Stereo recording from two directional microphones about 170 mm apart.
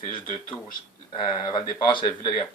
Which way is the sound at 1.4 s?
25° left (ahead or behind).